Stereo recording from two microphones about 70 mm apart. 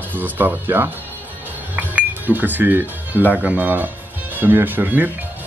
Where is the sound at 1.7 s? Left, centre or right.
Right.